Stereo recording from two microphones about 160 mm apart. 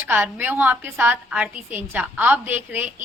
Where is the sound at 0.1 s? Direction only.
10° right (ahead or behind).